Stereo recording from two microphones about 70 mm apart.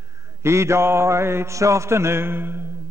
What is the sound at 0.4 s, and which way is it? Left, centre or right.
A man's voice, right.